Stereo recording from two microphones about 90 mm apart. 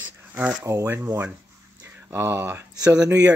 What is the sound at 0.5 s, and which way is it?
Speech, 35° right (ahead or behind).